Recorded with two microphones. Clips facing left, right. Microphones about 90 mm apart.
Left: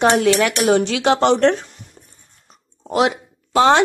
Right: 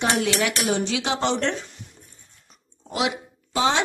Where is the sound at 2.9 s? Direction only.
50° left (ahead or behind).